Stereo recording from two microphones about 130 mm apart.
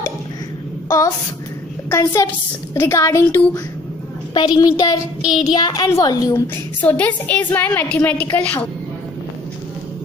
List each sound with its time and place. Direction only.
0.8 s a sound: 25° left (ahead or behind)
1.9 s a woman's voice: 25° left (ahead or behind)
4.7 s child singing: 30° left (ahead or behind)
5.6 s a woman's voice: 30° left (ahead or behind)
6.8 s a woman's voice: 10° left (ahead or behind)